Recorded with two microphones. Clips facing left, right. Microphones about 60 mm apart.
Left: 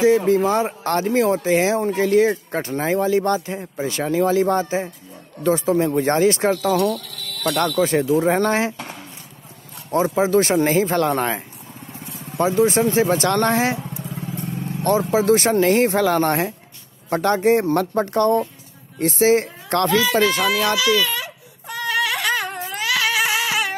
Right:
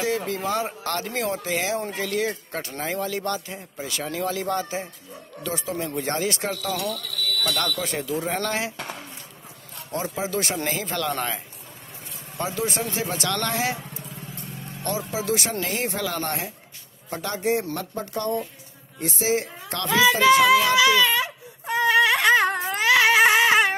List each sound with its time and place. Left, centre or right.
0.8 s speech: left
6.7 s speech: centre
7.7 s speech: left
9.8 s speech: left
14.8 s a woman's voice: left
19.9 s speech: right
20.7 s a sound: right
22.6 s cat: right